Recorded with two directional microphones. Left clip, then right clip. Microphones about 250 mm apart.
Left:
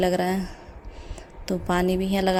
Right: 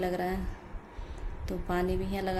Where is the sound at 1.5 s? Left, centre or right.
Left.